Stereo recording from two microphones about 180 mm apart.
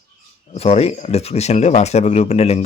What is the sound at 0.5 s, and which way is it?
Speech, 35° left (ahead or behind).